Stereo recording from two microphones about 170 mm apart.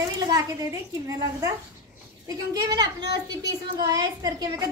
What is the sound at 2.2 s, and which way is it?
A woman's voice, 25° right (ahead or behind).